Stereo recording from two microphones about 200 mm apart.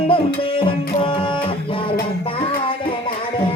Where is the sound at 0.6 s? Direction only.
25° left (ahead or behind).